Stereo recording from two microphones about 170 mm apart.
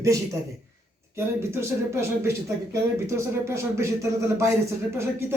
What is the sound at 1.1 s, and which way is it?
Speech, 15° right (ahead or behind).